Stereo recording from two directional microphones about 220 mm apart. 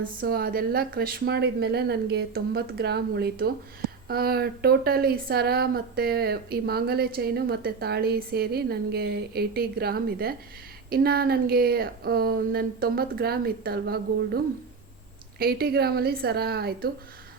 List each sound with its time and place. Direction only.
0.0 s speech: 40° right (ahead or behind)
15.4 s speech: 45° right (ahead or behind)